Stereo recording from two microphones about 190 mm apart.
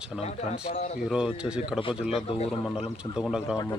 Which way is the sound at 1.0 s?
5° right (ahead or behind).